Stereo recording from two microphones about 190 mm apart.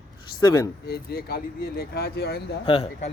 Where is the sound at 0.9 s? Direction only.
55° left (ahead or behind).